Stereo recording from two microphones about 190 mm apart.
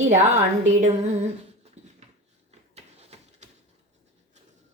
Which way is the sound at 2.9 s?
35° right (ahead or behind).